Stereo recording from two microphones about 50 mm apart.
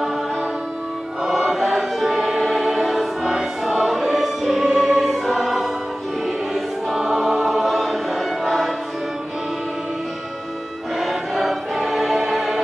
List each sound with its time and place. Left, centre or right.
1.2 s choir: centre
11.0 s music: centre